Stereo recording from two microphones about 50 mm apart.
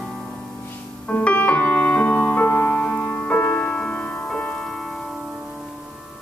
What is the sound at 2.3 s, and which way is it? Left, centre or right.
Music, left.